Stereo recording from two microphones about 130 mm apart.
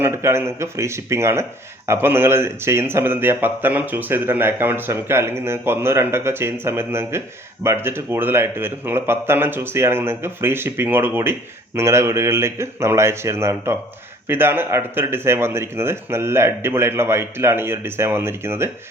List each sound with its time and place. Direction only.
0.0 s a man's voice: 20° right (ahead or behind)